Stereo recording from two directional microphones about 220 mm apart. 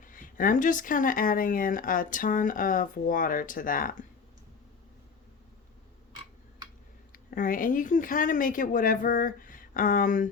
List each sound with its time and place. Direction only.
0.0 s speech: 40° left (ahead or behind)
7.1 s speech: 40° left (ahead or behind)